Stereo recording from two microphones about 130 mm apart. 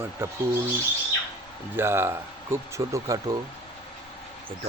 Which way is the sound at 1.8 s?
20° right (ahead or behind).